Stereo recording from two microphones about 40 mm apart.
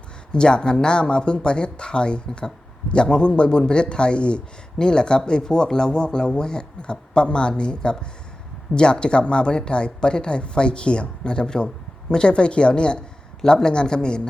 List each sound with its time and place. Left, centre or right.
0.3 s speech: left